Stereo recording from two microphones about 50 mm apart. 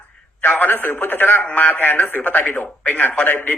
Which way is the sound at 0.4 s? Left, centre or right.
Left.